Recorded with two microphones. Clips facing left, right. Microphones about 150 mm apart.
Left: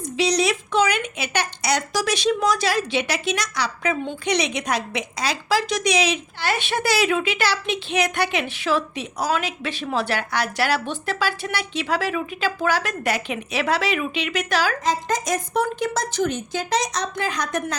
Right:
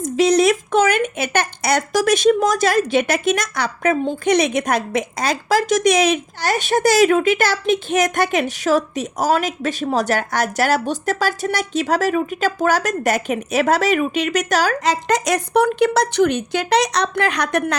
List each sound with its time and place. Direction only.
0.0 s a woman's voice: 50° right (ahead or behind)
14.8 s a woman's voice: 75° right (ahead or behind)